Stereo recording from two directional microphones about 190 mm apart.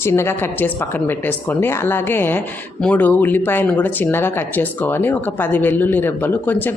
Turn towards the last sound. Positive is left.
turn(degrees=10)  # may be behind; listen again after turning